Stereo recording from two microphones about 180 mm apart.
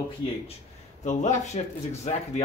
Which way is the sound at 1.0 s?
40° left (ahead or behind).